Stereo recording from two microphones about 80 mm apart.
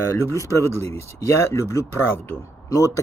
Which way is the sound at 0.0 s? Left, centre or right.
Left.